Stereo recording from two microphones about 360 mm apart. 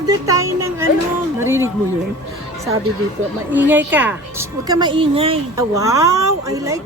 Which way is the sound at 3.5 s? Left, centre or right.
Centre.